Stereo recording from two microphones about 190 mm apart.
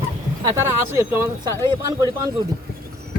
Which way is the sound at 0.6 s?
15° right (ahead or behind).